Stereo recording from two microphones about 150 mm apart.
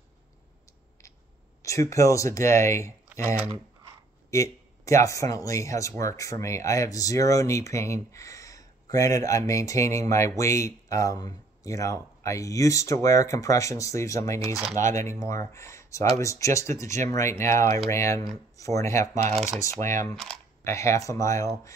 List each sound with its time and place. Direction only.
1.6 s speech: 20° left (ahead or behind)
19.2 s speech: 50° right (ahead or behind)
20.6 s speech: 20° left (ahead or behind)